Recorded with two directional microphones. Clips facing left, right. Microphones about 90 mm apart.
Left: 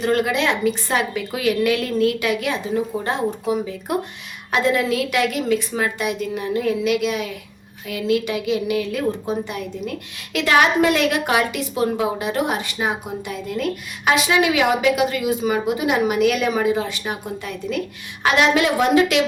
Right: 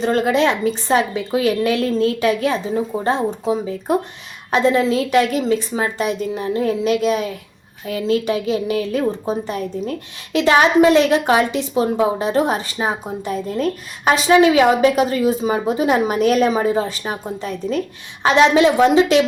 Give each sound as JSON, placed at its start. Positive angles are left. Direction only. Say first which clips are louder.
{"t": 0.0, "sound": "a woman's voice", "louder": "right 3 dB", "side_deg": -35}